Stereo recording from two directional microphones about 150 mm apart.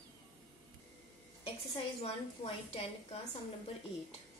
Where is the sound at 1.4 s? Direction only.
40° left (ahead or behind).